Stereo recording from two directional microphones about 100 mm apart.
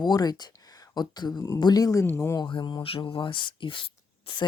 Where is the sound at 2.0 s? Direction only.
25° left (ahead or behind).